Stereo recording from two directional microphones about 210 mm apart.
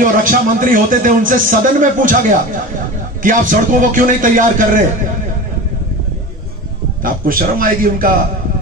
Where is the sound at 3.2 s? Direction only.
40° right (ahead or behind).